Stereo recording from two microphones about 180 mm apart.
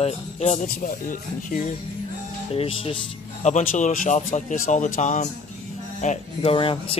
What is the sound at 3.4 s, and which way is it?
Speech, 40° left (ahead or behind).